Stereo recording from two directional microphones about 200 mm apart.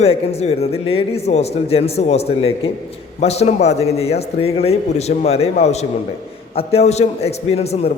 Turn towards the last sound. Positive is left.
turn(degrees=30)  # may be behind; listen again after turning